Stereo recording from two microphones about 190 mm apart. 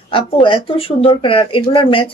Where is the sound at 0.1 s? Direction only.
25° left (ahead or behind).